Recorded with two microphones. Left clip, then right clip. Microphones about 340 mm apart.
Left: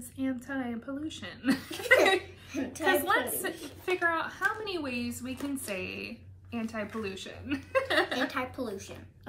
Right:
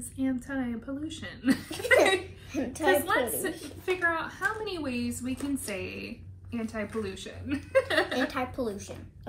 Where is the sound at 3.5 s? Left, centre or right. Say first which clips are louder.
Right 1 dB; centre.